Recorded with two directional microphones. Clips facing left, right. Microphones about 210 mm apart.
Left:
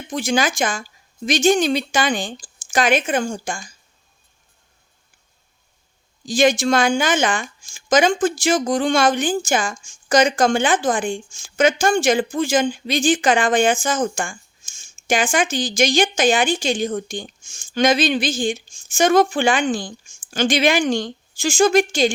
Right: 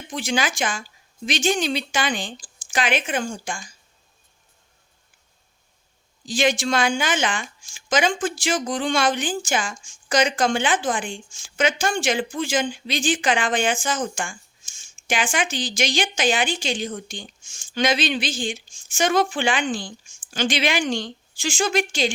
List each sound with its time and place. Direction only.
0.1 s speech: 45° left (ahead or behind)
6.2 s speech: 45° left (ahead or behind)